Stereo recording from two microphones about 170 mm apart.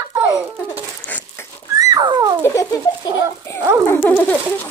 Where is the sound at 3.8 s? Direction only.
15° left (ahead or behind).